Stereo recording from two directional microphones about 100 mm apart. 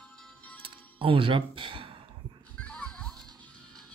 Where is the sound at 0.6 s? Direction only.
65° right (ahead or behind).